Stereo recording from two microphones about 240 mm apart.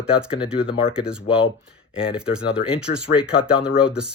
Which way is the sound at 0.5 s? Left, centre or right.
Left.